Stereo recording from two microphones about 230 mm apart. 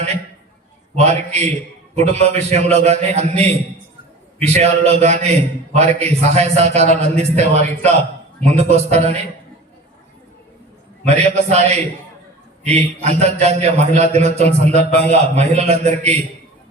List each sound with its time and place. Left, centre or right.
0.9 s a man's voice: right
11.0 s a man's voice: right